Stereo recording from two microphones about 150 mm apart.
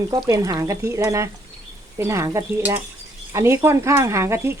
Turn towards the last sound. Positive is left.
turn(degrees=-20)  # may be behind; listen again after turning